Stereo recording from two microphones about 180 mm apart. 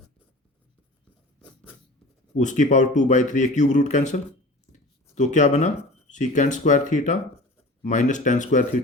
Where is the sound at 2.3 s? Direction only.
45° left (ahead or behind).